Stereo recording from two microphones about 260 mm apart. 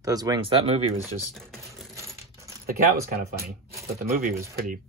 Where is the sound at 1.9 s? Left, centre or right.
Centre.